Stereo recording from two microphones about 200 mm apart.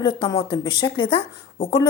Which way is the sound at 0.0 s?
20° left (ahead or behind).